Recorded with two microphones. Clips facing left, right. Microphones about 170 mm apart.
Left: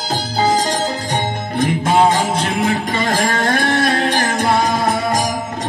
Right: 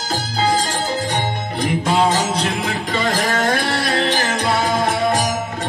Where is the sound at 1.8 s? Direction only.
50° left (ahead or behind).